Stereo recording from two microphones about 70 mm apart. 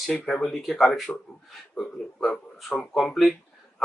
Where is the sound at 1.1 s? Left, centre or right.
Centre.